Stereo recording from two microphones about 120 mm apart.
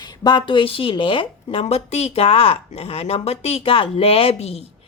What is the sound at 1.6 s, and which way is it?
Speech, 60° left (ahead or behind).